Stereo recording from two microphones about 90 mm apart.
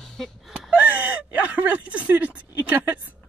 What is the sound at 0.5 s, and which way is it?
Whimper, 15° right (ahead or behind).